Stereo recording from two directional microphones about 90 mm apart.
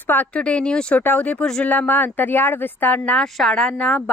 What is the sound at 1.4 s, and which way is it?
Speech, 5° left (ahead or behind).